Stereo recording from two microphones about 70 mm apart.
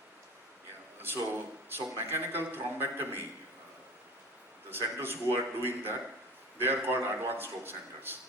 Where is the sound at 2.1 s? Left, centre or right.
Right.